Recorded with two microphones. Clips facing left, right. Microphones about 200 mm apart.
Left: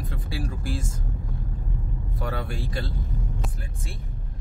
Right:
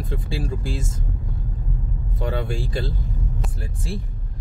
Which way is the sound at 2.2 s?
25° right (ahead or behind).